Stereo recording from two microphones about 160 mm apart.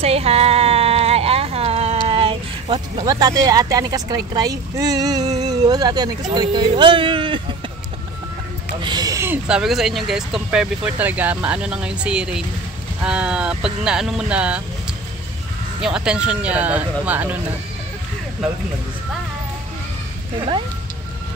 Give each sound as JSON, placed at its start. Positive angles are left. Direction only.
{"t": 0.0, "sound": "a sound", "side_deg": -40}
{"t": 6.3, "sound": "speech", "side_deg": -25}
{"t": 8.8, "sound": "speech", "side_deg": -25}
{"t": 15.8, "sound": "speech", "side_deg": -5}